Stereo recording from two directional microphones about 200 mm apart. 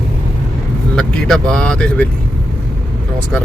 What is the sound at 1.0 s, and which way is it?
Speech, 5° left (ahead or behind).